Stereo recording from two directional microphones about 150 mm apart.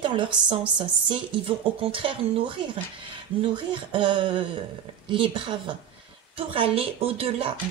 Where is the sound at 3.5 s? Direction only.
35° right (ahead or behind).